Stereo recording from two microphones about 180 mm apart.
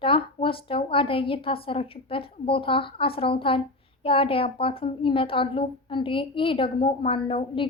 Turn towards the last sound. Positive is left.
turn(degrees=30)  # may be behind; listen again after turning